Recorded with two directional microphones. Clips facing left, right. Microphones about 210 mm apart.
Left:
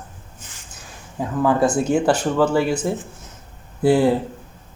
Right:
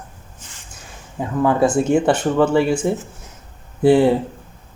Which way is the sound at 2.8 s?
Centre (ahead or behind).